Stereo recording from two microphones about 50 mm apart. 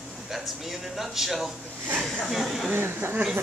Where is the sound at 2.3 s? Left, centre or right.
Centre.